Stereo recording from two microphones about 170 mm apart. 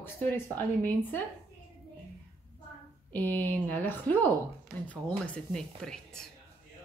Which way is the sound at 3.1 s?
10° left (ahead or behind).